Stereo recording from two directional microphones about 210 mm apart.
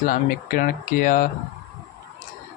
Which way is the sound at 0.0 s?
40° left (ahead or behind).